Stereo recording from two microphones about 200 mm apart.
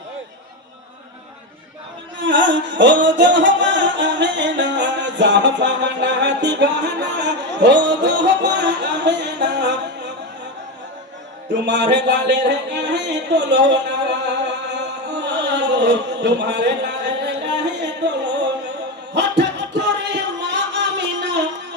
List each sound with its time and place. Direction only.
2.2 s music: 65° right (ahead or behind)
11.6 s music: 60° right (ahead or behind)
15.5 s a sound: 60° right (ahead or behind)